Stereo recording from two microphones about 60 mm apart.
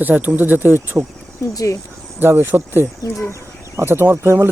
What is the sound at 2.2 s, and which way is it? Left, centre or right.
Speech, right.